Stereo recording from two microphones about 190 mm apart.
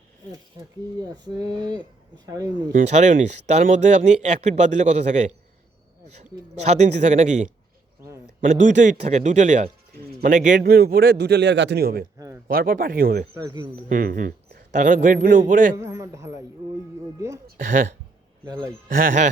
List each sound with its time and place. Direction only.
0.9 s speech: 20° right (ahead or behind)
2.7 s speech: 40° right (ahead or behind)
6.6 s a man's voice: 35° right (ahead or behind); by 12.0 s 55° right (ahead or behind)
12.1 s a sound: 15° right (ahead or behind)
12.5 s a man's voice: 50° right (ahead or behind)
13.3 s speech: 20° right (ahead or behind)
13.9 s a man's voice: 45° right (ahead or behind)
15.8 s a man's voice: 15° right (ahead or behind)
18.4 s speech: 20° right (ahead or behind)
18.9 s a man's voice: 45° right (ahead or behind)